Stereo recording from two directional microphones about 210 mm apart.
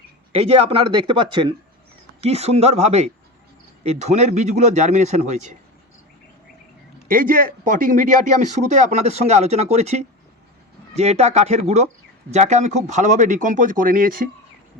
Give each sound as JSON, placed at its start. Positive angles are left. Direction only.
{"t": 0.3, "sound": "speech", "side_deg": -25}
{"t": 7.1, "sound": "speech", "side_deg": -40}